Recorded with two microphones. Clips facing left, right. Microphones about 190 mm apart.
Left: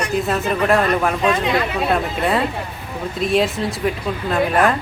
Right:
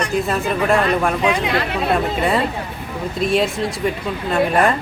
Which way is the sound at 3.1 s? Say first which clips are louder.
Even; centre (ahead or behind).